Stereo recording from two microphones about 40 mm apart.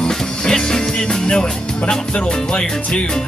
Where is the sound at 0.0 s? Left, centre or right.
Centre.